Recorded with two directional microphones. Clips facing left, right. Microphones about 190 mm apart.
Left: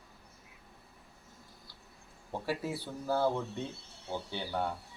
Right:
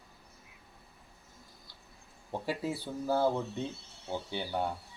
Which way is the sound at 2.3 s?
15° right (ahead or behind).